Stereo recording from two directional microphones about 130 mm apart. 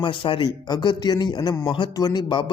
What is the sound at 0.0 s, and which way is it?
Speech, 40° left (ahead or behind).